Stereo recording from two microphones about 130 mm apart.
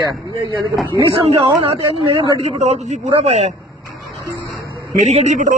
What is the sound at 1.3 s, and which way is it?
Speech, 50° right (ahead or behind).